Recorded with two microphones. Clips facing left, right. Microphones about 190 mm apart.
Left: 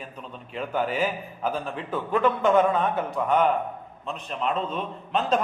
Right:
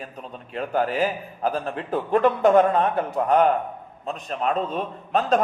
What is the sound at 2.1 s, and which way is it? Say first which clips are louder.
Speech: right 4 dB; 40° right (ahead or behind).